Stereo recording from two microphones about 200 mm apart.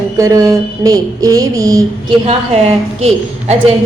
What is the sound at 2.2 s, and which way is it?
Speech, 30° right (ahead or behind).